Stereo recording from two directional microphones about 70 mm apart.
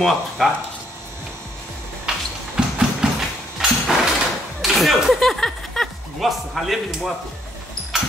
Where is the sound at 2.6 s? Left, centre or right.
Centre.